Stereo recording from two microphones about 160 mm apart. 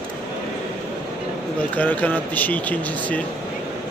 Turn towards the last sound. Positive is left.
turn(degrees=10)  # may be behind; listen again after turning